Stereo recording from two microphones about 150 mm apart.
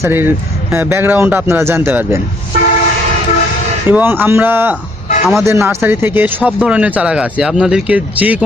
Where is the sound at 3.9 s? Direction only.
15° right (ahead or behind).